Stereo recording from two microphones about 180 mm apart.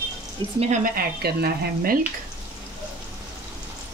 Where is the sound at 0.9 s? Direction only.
55° right (ahead or behind).